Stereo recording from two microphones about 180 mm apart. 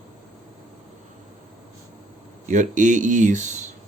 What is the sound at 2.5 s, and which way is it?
Speech, 45° right (ahead or behind).